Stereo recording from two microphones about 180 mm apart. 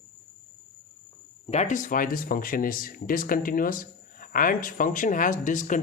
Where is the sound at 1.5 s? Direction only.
40° left (ahead or behind).